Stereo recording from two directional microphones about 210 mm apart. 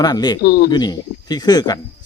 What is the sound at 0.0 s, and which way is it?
Speech, 20° left (ahead or behind).